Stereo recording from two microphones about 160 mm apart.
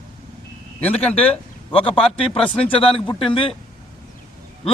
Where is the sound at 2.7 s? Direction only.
35° left (ahead or behind).